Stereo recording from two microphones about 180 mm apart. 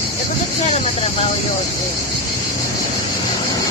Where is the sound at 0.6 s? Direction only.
35° left (ahead or behind).